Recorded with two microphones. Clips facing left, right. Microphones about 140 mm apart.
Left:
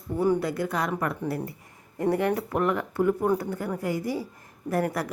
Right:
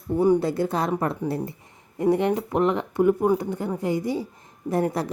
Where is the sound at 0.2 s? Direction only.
25° right (ahead or behind).